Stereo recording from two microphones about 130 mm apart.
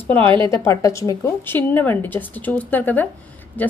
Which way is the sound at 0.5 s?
25° left (ahead or behind).